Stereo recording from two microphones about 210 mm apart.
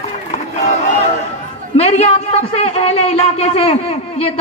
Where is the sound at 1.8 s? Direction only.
30° left (ahead or behind).